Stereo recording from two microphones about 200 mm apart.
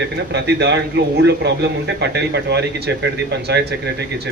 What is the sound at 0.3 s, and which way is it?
A man's voice, 60° right (ahead or behind).